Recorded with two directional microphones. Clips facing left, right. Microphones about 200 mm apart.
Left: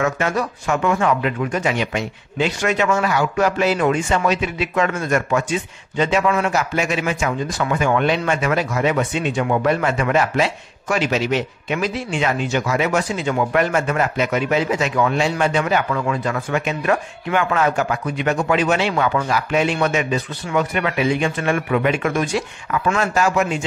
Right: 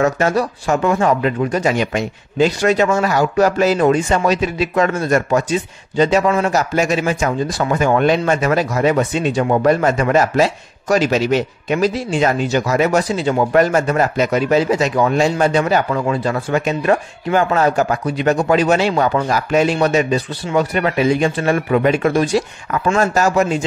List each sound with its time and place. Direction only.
0.0 s speech: 35° right (ahead or behind)